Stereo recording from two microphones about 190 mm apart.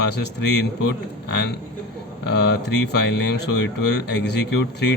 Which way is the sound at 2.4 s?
60° left (ahead or behind).